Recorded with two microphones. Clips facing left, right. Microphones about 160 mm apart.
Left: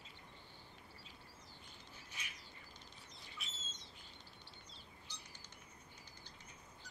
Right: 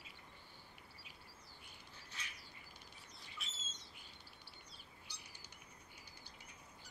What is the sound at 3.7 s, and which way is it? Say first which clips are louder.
Owl: left 1 dB; 10° right (ahead or behind).